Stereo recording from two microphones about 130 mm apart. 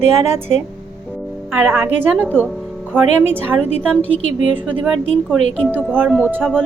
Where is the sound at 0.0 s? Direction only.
20° right (ahead or behind).